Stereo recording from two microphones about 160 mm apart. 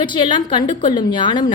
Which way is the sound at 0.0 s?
30° left (ahead or behind).